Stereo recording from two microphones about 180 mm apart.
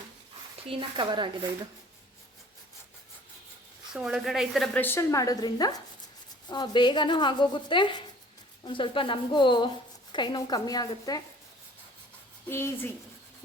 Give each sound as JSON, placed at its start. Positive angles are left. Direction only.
{"t": 0.7, "sound": "speech", "side_deg": -25}
{"t": 3.9, "sound": "a woman's voice", "side_deg": 0}
{"t": 12.5, "sound": "a woman's voice", "side_deg": 15}